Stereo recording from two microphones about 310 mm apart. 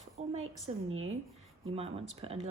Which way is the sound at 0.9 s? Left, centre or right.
Right.